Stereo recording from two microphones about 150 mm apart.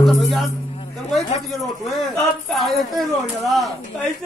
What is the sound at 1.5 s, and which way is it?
A man's voice, centre (ahead or behind).